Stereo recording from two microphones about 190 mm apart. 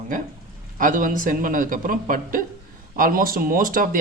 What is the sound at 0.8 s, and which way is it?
Speech, 45° right (ahead or behind).